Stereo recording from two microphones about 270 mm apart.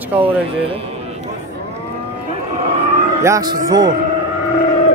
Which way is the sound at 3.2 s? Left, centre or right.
Centre.